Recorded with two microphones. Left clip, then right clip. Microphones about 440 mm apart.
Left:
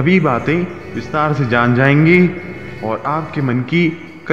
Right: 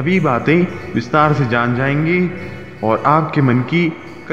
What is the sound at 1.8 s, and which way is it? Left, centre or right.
Speech, left.